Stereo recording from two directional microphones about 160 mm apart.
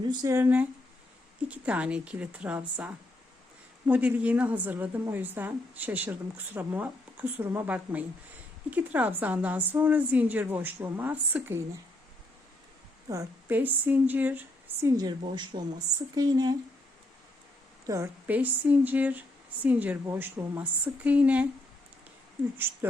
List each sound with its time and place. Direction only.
0.1 s a woman's voice: 20° right (ahead or behind)
13.1 s speech: 15° right (ahead or behind)
15.5 s a woman's voice: 35° right (ahead or behind)
17.8 s a woman's voice: 20° right (ahead or behind)
22.5 s a woman's voice: 15° right (ahead or behind)